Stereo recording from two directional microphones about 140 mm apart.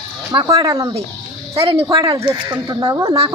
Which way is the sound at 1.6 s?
45° right (ahead or behind).